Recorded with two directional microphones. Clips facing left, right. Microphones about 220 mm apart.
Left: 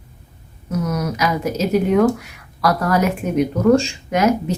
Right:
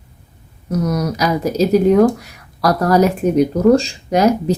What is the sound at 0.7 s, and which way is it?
Speech, 35° right (ahead or behind).